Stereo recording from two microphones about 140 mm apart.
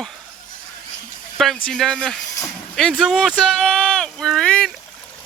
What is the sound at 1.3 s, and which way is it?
Speech, centre (ahead or behind).